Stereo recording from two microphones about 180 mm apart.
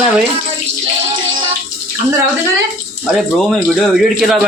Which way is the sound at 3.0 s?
Centre (ahead or behind).